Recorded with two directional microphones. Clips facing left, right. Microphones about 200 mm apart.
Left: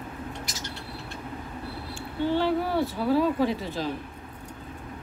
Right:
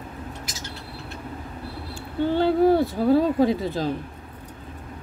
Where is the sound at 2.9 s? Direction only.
45° right (ahead or behind).